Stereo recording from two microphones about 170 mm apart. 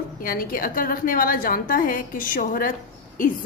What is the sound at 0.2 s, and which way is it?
A woman's voice, 55° left (ahead or behind).